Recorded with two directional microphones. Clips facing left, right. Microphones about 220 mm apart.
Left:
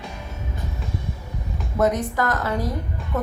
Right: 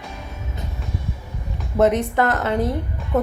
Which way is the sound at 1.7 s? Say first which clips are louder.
Right 4 dB; 25° right (ahead or behind).